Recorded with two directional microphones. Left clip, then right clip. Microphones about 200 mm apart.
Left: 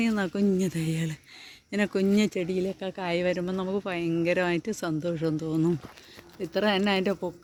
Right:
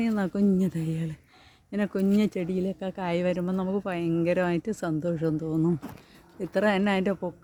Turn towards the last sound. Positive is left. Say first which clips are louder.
# even
turn(degrees=0)  # may be behind; listen again after turning